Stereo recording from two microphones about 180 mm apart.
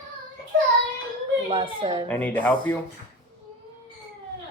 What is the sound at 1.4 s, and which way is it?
Speech, 30° right (ahead or behind).